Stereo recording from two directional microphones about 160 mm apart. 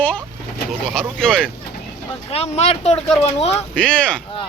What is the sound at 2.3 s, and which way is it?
Speech, 40° left (ahead or behind).